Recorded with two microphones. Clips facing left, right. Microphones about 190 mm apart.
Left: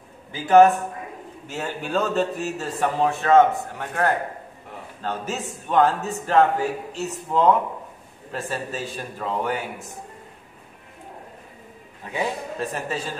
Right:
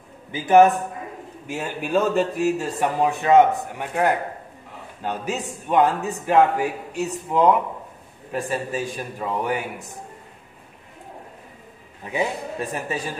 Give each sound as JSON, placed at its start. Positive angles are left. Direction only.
{"t": 0.3, "sound": "speech", "side_deg": -20}
{"t": 12.1, "sound": "speech", "side_deg": -15}